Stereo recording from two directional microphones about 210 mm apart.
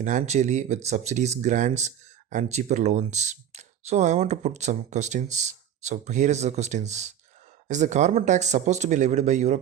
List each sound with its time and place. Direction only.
0.0 s speech: 35° right (ahead or behind)